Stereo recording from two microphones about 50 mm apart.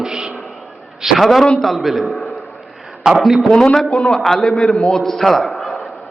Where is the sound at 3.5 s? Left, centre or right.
Centre.